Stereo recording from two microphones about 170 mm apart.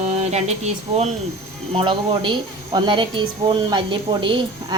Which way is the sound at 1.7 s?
30° right (ahead or behind).